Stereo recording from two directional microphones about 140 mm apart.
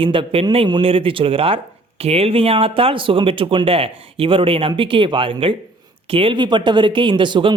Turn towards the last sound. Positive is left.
turn(degrees=-35)  # may be behind; listen again after turning